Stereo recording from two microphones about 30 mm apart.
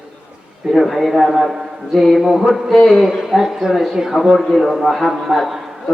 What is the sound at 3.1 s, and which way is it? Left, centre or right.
Speech, centre.